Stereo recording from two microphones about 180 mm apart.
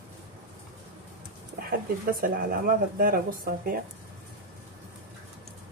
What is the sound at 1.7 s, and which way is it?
Speech, 50° right (ahead or behind).